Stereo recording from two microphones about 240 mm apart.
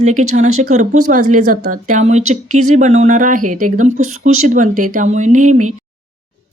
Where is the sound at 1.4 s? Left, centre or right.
Right.